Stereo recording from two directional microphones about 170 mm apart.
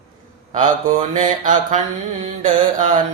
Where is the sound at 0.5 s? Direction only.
45° right (ahead or behind).